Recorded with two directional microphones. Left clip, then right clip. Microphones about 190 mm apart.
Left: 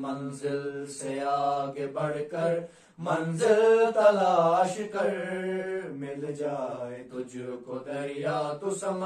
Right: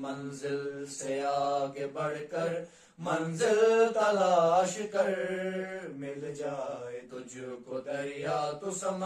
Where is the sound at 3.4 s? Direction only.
15° right (ahead or behind).